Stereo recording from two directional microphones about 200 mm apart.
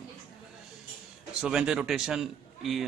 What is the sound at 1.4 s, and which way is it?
Speech, 5° right (ahead or behind).